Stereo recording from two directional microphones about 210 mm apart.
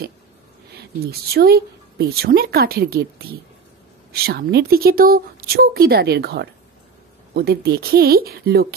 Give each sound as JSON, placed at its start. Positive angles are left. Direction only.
{"t": 0.7, "sound": "a woman's voice", "side_deg": -50}